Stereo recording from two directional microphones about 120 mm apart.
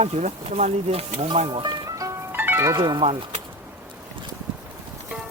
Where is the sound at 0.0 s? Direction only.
65° right (ahead or behind).